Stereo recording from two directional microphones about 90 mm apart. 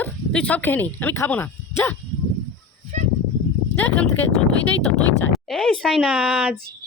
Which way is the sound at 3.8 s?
20° left (ahead or behind).